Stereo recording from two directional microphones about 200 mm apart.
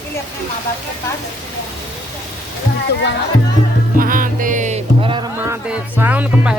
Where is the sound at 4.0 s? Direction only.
45° right (ahead or behind); by 5.2 s 25° right (ahead or behind).